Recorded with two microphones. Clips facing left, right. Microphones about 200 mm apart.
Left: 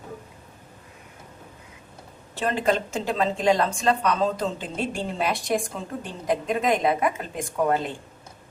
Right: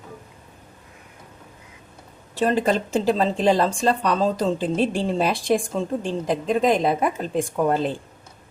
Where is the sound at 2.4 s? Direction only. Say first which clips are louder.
Right 3 dB; 35° right (ahead or behind).